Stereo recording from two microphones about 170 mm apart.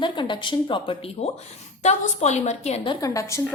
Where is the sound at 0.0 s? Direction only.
30° left (ahead or behind).